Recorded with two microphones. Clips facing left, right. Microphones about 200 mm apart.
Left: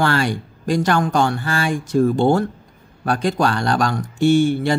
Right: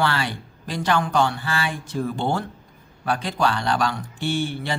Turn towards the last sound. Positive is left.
turn(degrees=45)  # may be behind; listen again after turning